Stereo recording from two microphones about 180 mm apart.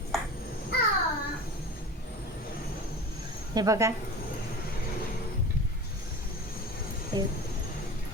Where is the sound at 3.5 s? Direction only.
20° right (ahead or behind).